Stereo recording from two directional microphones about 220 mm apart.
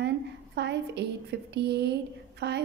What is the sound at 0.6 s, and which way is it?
A woman's voice, 50° right (ahead or behind).